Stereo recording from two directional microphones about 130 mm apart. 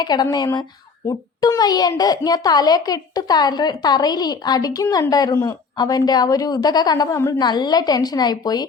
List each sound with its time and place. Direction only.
0.0 s a woman's voice: 30° left (ahead or behind)